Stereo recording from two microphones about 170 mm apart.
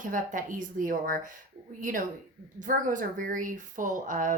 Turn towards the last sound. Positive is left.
turn(degrees=-50)  # may be behind; listen again after turning